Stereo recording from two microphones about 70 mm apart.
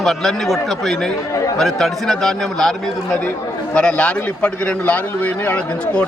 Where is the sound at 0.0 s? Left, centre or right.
Centre.